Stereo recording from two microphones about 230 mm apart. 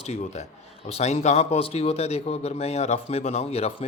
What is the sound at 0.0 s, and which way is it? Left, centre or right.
A man's voice, left.